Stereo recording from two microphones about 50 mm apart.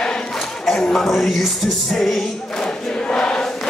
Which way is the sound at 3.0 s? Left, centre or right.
Centre.